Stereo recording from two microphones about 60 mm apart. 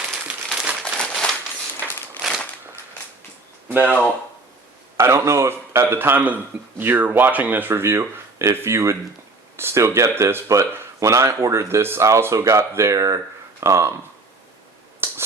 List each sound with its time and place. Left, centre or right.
0.5 s crumpling: centre
0.9 s a sound: centre
3.7 s speech: right
5.1 s a man's voice: right
7.7 s speech: right
13.6 s speech: right
15.0 s a sound: right